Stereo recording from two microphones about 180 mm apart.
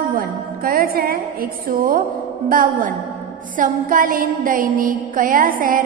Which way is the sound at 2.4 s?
50° right (ahead or behind).